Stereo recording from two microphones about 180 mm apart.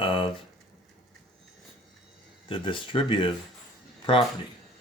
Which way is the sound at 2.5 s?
30° left (ahead or behind).